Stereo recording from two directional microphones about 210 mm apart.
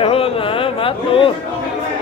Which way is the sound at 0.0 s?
25° left (ahead or behind).